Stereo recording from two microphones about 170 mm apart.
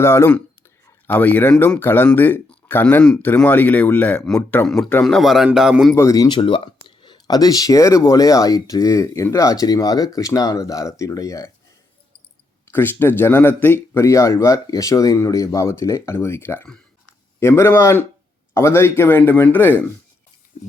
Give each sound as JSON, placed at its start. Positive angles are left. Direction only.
{"t": 0.0, "sound": "speech", "side_deg": 15}
{"t": 5.9, "sound": "speech", "side_deg": 15}
{"t": 12.7, "sound": "speech", "side_deg": 10}